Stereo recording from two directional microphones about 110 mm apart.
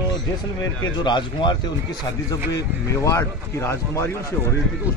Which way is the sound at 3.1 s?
25° left (ahead or behind).